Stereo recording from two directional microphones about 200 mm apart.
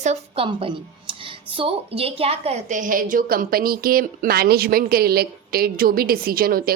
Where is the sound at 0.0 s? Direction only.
30° right (ahead or behind).